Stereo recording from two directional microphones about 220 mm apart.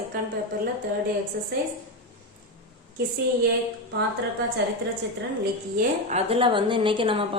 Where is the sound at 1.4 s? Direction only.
45° right (ahead or behind).